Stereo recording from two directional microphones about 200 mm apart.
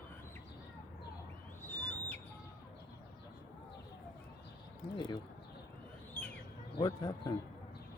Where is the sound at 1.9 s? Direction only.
10° left (ahead or behind).